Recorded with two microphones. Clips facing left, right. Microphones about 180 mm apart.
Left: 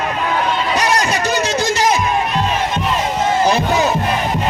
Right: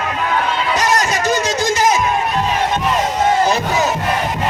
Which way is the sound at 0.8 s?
45° right (ahead or behind).